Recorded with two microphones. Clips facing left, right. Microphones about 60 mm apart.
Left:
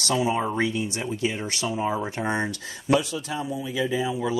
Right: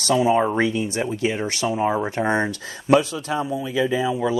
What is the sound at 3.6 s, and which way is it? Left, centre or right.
Speech, right.